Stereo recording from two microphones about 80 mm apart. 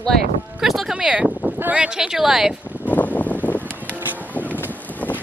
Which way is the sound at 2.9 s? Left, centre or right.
Centre.